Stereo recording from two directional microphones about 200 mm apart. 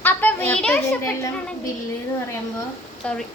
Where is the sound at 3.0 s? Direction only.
5° left (ahead or behind).